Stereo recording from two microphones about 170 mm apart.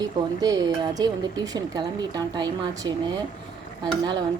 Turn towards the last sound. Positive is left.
turn(degrees=-25)  # may be behind; listen again after turning